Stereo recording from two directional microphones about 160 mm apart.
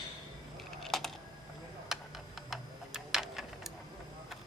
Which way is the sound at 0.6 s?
Centre (ahead or behind).